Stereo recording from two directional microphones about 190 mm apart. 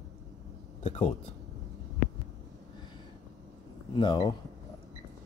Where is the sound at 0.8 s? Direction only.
30° left (ahead or behind).